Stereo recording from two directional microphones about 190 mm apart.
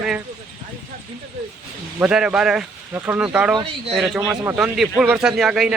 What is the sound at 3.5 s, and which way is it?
Speech, 30° right (ahead or behind).